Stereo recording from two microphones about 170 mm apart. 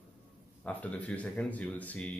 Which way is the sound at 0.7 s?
10° left (ahead or behind).